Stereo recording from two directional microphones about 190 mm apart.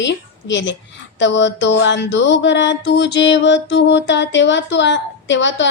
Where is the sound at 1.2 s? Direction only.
70° left (ahead or behind).